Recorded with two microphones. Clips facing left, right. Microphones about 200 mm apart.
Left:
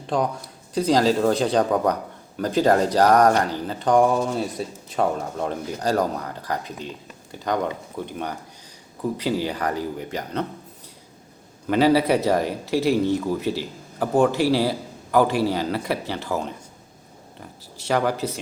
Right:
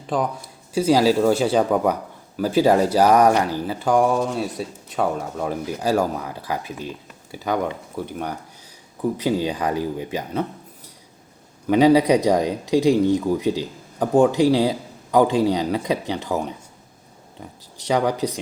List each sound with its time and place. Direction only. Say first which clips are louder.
0.1 s speech: even; centre (ahead or behind)
11.6 s speech: right 3 dB; 15° right (ahead or behind)